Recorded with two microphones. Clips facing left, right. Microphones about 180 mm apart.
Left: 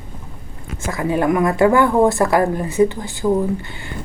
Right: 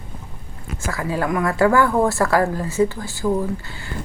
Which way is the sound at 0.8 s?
20° left (ahead or behind).